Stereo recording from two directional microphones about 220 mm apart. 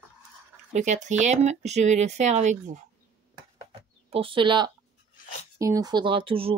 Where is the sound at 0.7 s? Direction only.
30° right (ahead or behind).